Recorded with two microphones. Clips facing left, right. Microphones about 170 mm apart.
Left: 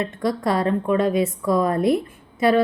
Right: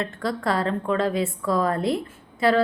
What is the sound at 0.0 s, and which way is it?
Speech, 20° left (ahead or behind).